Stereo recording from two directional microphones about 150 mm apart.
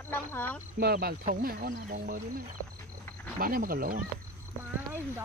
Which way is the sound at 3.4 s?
70° right (ahead or behind).